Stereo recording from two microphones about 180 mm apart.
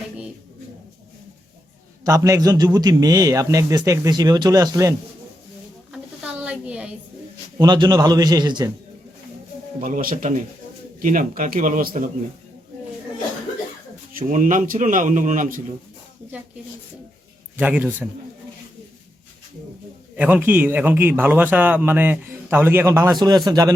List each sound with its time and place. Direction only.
2.0 s a man's voice: 20° right (ahead or behind)
5.9 s a sound: 5° right (ahead or behind)
7.6 s a man's voice: 20° right (ahead or behind)
9.8 s a man's voice: 50° right (ahead or behind)
14.1 s a man's voice: 50° right (ahead or behind)
17.6 s a man's voice: 10° right (ahead or behind)
20.1 s a man's voice: 10° right (ahead or behind)